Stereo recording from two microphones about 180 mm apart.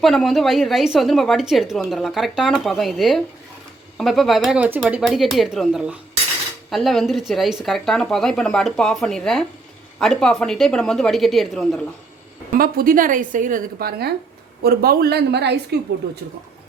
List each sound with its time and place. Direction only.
0.0 s a woman's voice: centre (ahead or behind)
12.5 s a woman's voice: 55° right (ahead or behind)